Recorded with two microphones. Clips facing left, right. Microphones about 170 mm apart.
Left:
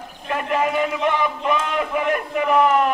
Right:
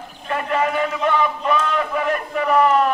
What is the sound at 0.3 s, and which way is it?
Speech, 10° left (ahead or behind).